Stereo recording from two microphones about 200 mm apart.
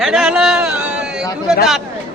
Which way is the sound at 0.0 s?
Centre (ahead or behind).